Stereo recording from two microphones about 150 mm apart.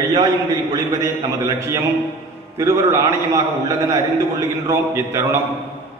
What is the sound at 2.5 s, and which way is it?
A man's voice, 20° right (ahead or behind).